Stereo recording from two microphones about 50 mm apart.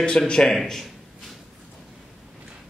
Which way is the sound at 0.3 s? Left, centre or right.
Centre.